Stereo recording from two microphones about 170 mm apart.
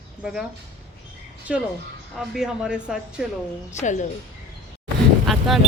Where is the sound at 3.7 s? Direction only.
45° left (ahead or behind).